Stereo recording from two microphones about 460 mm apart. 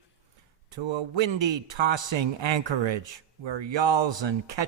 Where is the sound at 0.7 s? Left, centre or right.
Right.